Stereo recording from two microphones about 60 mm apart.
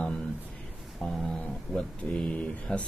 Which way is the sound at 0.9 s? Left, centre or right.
Centre.